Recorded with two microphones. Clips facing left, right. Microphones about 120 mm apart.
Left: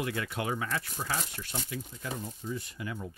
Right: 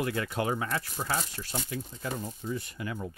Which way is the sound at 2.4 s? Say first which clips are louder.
Right 2 dB; 60° right (ahead or behind).